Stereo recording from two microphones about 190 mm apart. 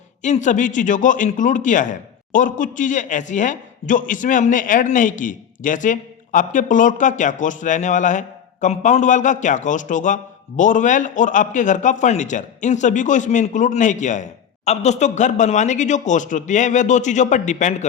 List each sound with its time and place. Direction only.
0.2 s a man's voice: 40° left (ahead or behind)